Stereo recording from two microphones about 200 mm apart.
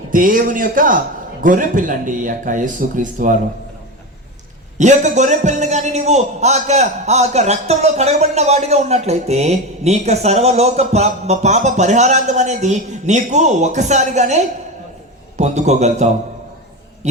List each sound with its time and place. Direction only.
0.1 s a man's voice: 45° right (ahead or behind)
4.8 s a man's voice: 35° right (ahead or behind)